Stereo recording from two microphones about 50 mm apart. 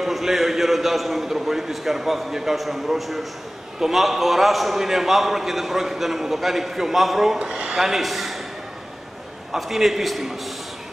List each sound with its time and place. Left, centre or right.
0.0 s a man's voice: centre
7.3 s speech: centre
7.8 s a man's voice: centre
9.5 s a man's voice: centre